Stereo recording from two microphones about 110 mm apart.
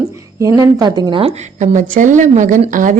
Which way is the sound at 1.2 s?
75° right (ahead or behind).